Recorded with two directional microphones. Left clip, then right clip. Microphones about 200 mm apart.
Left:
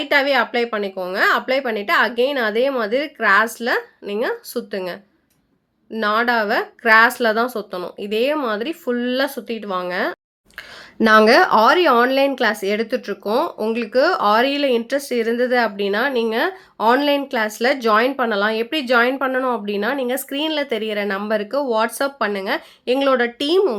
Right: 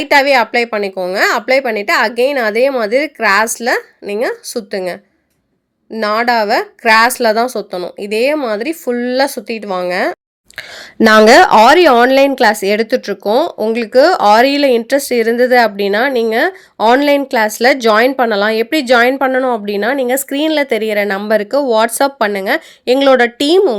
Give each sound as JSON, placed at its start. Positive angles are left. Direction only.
{"t": 0.0, "sound": "speech", "side_deg": -35}